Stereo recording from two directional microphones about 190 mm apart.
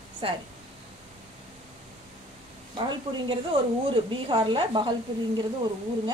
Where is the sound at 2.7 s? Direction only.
25° right (ahead or behind).